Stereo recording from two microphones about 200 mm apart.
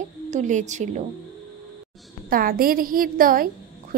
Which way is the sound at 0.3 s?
40° right (ahead or behind).